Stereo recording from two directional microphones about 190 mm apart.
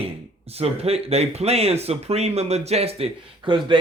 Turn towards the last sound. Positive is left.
turn(degrees=-25)  # may be behind; listen again after turning